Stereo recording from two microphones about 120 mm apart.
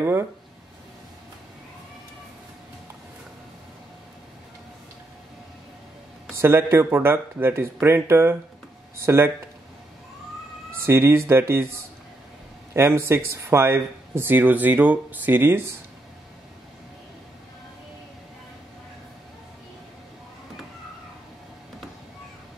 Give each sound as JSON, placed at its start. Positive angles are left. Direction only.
{"t": 0.0, "sound": "speech", "side_deg": -20}
{"t": 6.3, "sound": "speech", "side_deg": -20}
{"t": 10.9, "sound": "speech", "side_deg": -20}
{"t": 12.7, "sound": "speech", "side_deg": -20}